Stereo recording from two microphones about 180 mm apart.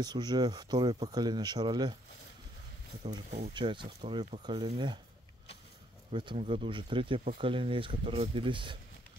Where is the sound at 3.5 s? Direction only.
25° right (ahead or behind).